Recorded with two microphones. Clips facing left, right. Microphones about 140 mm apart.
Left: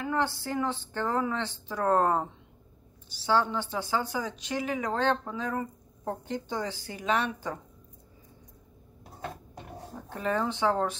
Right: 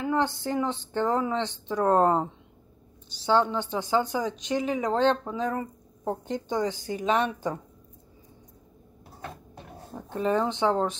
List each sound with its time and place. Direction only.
0.0 s a woman's voice: 20° right (ahead or behind)
10.0 s a woman's voice: 20° right (ahead or behind)